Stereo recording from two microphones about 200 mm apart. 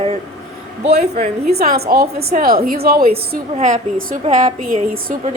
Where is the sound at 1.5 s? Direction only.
50° right (ahead or behind).